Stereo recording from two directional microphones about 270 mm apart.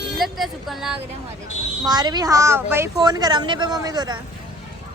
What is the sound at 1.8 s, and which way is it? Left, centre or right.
A woman's voice, centre.